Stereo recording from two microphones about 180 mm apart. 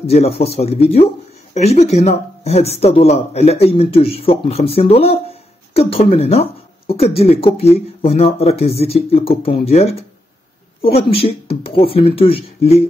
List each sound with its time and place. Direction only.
0.0 s speech: 35° left (ahead or behind)